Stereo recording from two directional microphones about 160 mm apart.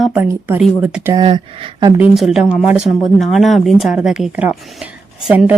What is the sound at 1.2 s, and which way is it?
Speech, 35° right (ahead or behind).